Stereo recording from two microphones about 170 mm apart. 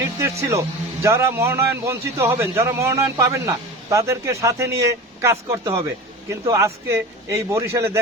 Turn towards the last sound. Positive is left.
turn(degrees=-15)  # may be behind; listen again after turning